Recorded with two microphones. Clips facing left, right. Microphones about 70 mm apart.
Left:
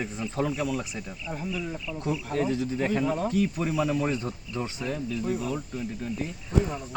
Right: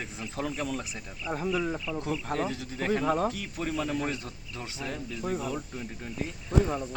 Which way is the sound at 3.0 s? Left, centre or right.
Right.